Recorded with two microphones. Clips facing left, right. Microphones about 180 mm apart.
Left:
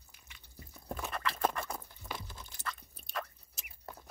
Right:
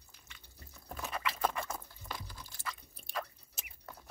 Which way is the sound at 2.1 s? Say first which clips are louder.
Left 1 dB; 20° left (ahead or behind).